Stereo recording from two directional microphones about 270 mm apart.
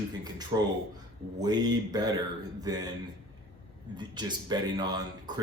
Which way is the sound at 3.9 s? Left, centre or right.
Centre.